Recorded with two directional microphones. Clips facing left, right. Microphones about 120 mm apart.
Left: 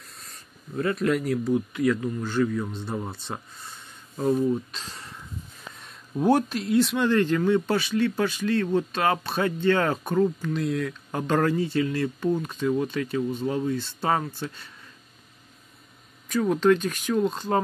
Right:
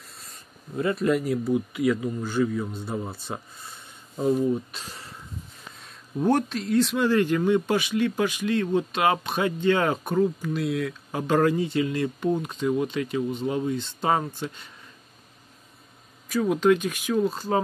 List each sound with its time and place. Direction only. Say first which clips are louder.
0.9 s speech: right 1 dB; 5° right (ahead or behind)
5.8 s speech: left 1 dB; 5° left (ahead or behind); by 14.7 s 15° right (ahead or behind)
16.3 s speech: even; 10° right (ahead or behind)